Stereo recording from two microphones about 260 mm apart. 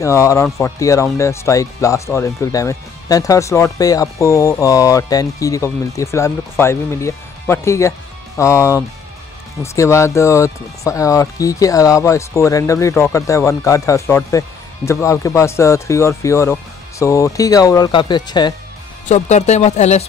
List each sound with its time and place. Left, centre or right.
0.0 s speech: centre
19.0 s speech: left